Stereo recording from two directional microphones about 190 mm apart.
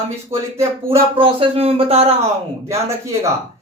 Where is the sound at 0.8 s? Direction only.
30° right (ahead or behind).